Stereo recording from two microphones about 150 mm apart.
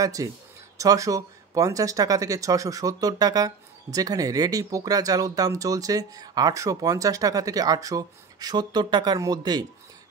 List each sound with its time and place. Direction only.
0.0 s speech: 25° right (ahead or behind)